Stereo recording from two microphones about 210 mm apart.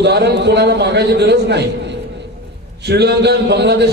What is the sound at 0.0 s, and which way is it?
A man's voice, 55° right (ahead or behind).